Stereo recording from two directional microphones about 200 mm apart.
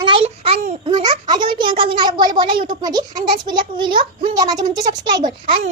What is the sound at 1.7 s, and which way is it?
A child's voice, 25° right (ahead or behind).